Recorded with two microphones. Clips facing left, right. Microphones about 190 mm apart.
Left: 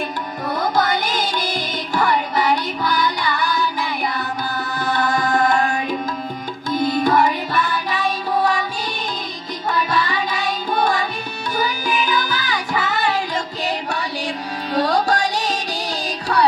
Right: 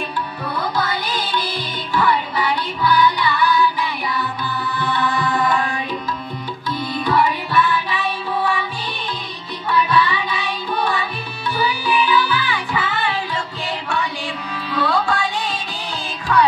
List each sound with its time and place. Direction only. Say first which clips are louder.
0.5 s music: left 4 dB; 45° left (ahead or behind)
9.7 s music: right 3 dB; 45° left (ahead or behind)
14.7 s music: left 2 dB; 40° left (ahead or behind)